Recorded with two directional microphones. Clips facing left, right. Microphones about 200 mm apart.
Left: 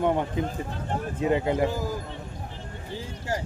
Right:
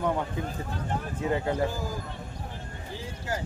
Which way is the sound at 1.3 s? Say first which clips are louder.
Left 3 dB; 20° left (ahead or behind).